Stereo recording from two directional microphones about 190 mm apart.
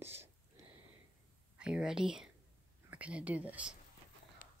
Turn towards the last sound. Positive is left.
turn(degrees=-5)  # may be behind; listen again after turning